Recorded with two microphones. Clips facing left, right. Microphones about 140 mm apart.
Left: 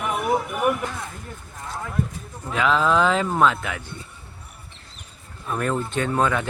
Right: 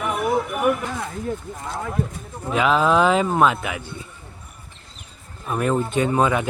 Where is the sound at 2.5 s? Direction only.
15° right (ahead or behind).